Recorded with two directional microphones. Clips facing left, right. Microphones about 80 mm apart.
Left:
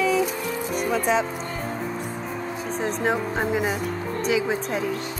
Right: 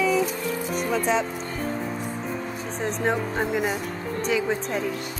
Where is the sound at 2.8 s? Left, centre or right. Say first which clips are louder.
Even; centre.